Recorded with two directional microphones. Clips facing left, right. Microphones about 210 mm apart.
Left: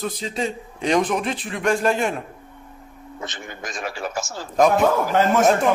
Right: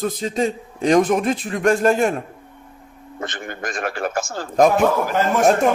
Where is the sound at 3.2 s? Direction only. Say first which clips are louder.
Right 5 dB; 55° right (ahead or behind).